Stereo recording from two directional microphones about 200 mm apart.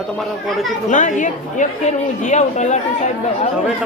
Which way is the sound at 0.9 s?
40° left (ahead or behind).